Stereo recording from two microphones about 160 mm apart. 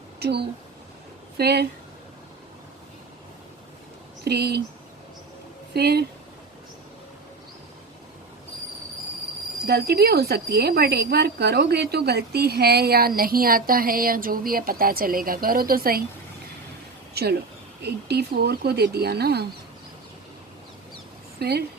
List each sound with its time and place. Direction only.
0.2 s speech: 90° right
4.2 s speech: 90° right
5.7 s speech: 90° right
9.6 s a woman's voice: 90° right; by 16.0 s 65° right (ahead or behind)
17.2 s speech: 90° right
21.3 s speech: 90° right